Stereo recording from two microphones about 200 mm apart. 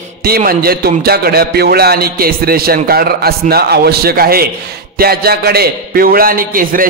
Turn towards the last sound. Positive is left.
turn(degrees=-45)  # may be behind; listen again after turning